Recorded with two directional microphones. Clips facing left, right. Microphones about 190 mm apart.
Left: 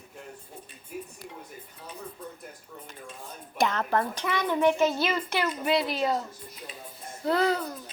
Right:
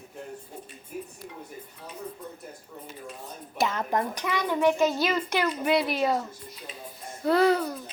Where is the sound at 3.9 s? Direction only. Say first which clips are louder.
Even; 15° right (ahead or behind).